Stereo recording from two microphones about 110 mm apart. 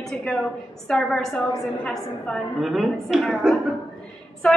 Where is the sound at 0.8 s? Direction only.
5° left (ahead or behind).